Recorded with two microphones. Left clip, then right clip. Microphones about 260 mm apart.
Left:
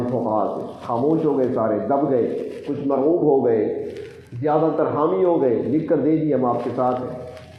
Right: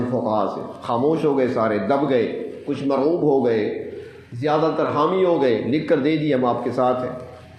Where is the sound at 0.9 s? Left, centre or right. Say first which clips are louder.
Even; right.